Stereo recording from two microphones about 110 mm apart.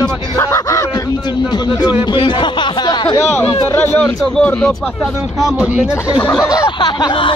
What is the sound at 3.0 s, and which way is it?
Speech, 25° left (ahead or behind).